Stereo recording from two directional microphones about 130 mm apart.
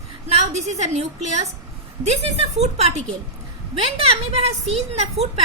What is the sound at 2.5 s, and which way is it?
A woman's voice, 55° right (ahead or behind).